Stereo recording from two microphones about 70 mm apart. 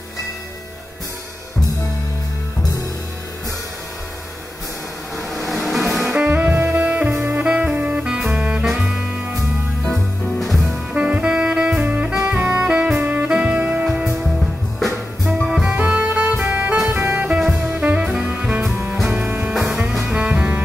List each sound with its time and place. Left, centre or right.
5.5 s music: centre
6.1 s music: right
7.4 s saxophone: centre
8.6 s music: centre
10.4 s music: centre
10.9 s music: centre
13.8 s music: centre
15.4 s music: centre
17.3 s jazz: centre
17.7 s saxophone: centre
18.5 s music: right